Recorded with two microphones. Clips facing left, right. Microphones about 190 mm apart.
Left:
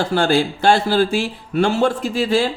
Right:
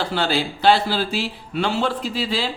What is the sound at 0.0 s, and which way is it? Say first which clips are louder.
Speech: left 5 dB; 45° left (ahead or behind).